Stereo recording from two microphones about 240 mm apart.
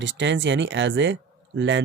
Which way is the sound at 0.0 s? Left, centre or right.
Right.